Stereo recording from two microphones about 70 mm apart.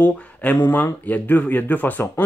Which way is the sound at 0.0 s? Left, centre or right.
Left.